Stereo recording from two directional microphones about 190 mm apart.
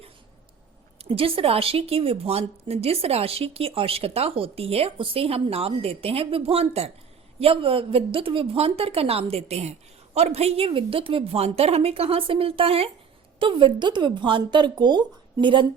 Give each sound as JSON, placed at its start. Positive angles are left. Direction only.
{"t": 1.0, "sound": "a woman's voice", "side_deg": -30}